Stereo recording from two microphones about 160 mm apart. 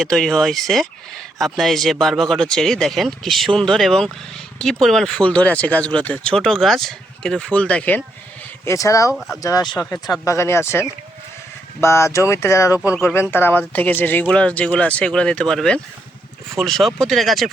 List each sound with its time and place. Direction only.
0.0 s speech: 5° left (ahead or behind)
8.6 s speech: 20° left (ahead or behind)
9.1 s speech: centre (ahead or behind)
9.4 s speech: 20° left (ahead or behind); by 17.5 s centre (ahead or behind)